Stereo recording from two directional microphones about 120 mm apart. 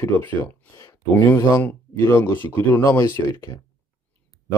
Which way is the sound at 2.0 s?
20° left (ahead or behind).